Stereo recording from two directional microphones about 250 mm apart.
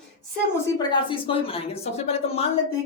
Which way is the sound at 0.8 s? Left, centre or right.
Centre.